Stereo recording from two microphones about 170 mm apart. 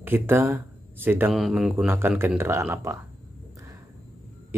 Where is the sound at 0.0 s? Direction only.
15° right (ahead or behind).